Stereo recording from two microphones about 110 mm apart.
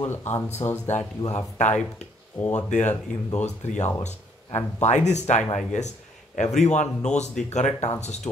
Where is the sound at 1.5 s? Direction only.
90° left.